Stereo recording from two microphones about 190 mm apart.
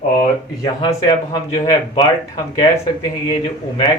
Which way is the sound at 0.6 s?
20° left (ahead or behind).